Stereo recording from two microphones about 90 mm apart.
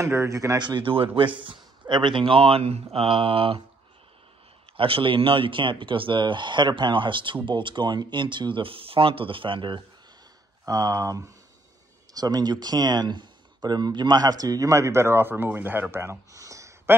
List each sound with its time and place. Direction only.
0.0 s a man's voice: 30° right (ahead or behind)
0.6 s speech: 60° right (ahead or behind); by 3.6 s 90° right
4.7 s speech: 85° right; by 9.8 s 65° right (ahead or behind)
10.6 s speech: 40° right (ahead or behind)